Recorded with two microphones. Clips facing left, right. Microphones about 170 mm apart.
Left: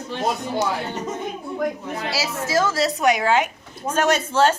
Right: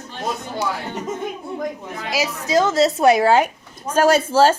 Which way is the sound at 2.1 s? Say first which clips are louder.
Right 4 dB; 15° right (ahead or behind).